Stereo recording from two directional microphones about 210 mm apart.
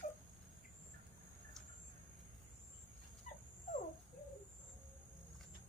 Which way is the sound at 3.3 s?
40° left (ahead or behind).